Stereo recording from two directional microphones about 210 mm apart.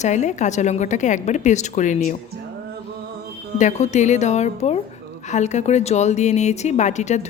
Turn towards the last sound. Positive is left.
turn(degrees=35)  # may be behind; listen again after turning